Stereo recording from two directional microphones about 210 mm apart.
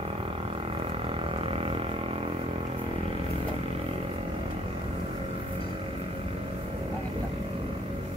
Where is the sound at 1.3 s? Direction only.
25° right (ahead or behind).